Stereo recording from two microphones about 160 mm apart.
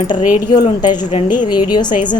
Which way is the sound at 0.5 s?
25° left (ahead or behind).